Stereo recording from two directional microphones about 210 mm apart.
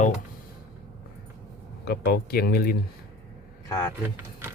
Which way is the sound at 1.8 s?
50° left (ahead or behind).